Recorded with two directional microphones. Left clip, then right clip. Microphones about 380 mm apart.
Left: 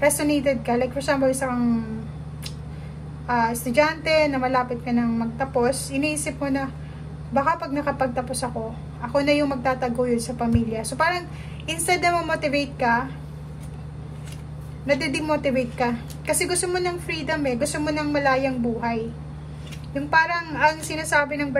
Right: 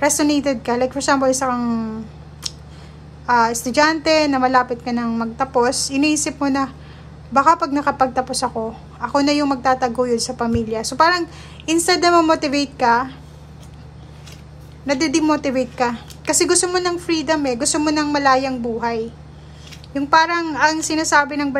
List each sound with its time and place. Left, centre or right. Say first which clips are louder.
0.0 s a woman's voice: right 3 dB; centre
3.3 s a woman's voice: right 7 dB; centre
14.9 s a woman's voice: right 5 dB; centre